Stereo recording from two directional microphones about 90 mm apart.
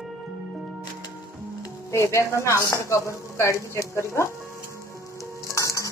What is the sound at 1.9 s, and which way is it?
Speech, 30° left (ahead or behind).